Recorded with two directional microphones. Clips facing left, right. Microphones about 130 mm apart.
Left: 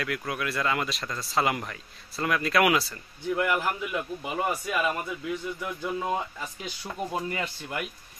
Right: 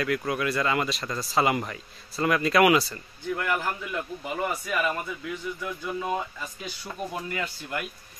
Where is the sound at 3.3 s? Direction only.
15° left (ahead or behind).